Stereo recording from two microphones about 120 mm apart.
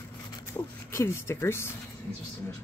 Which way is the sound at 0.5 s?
30° left (ahead or behind).